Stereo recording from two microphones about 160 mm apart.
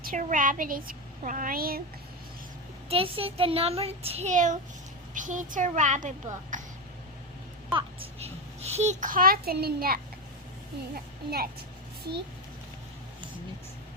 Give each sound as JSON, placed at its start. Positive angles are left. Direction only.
{"t": 0.0, "sound": "speech", "side_deg": -55}
{"t": 2.9, "sound": "a child's voice", "side_deg": -35}
{"t": 6.5, "sound": "a sound", "side_deg": -50}
{"t": 7.7, "sound": "a child's voice", "side_deg": -35}